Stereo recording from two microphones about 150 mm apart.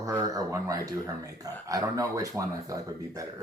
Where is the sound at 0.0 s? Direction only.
25° right (ahead or behind).